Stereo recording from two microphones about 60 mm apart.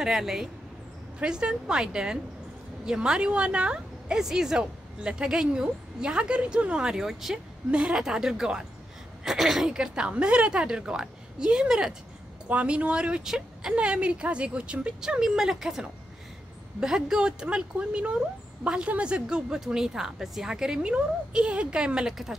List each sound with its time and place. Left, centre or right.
0.0 s a woman's voice: centre
13.7 s a woman's voice: centre